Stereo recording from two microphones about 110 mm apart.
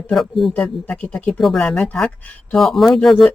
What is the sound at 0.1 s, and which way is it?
Speech, centre (ahead or behind).